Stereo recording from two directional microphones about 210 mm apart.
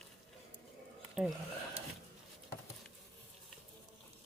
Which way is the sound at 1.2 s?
5° right (ahead or behind).